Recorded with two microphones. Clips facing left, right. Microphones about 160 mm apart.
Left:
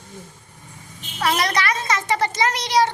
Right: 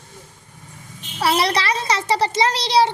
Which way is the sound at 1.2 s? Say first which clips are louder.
Right 2 dB; 30° right (ahead or behind).